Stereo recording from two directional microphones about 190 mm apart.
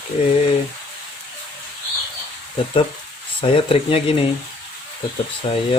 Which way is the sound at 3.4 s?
30° left (ahead or behind).